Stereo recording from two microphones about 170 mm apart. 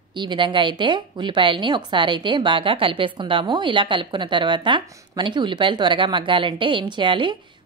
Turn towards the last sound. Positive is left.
turn(degrees=-30)  # may be behind; listen again after turning